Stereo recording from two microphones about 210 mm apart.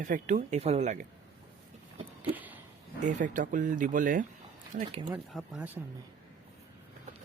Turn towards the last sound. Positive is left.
turn(degrees=-10)  # may be behind; listen again after turning